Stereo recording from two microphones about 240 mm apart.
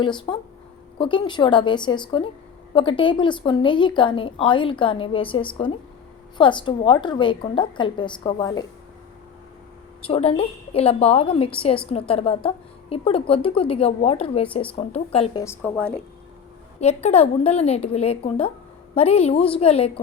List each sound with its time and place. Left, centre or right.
0.0 s speech: centre
10.1 s speech: left
15.4 s a woman's voice: centre
16.8 s speech: left